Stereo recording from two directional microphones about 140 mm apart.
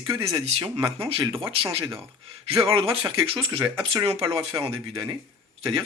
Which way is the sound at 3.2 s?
40° right (ahead or behind).